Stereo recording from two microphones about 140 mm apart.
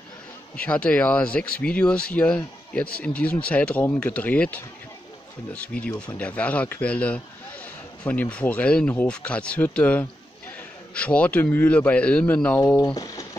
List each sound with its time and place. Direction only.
0.6 s speech: 10° left (ahead or behind)
12.7 s speech: 25° left (ahead or behind)